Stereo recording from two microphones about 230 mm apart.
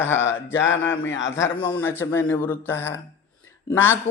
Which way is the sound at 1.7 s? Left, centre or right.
Centre.